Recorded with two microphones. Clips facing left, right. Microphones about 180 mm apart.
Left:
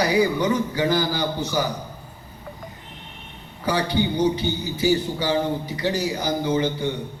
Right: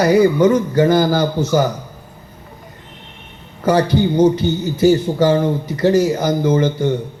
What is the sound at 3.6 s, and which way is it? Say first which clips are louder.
A man's voice: right 8 dB; 45° right (ahead or behind).